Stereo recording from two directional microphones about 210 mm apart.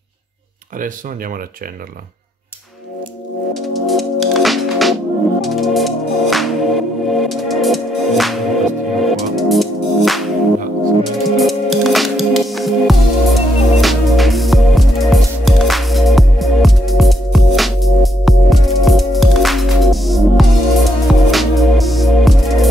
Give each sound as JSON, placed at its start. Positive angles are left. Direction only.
{"t": 0.7, "sound": "speech", "side_deg": -40}
{"t": 3.5, "sound": "music", "side_deg": 0}
{"t": 11.2, "sound": "music", "side_deg": 0}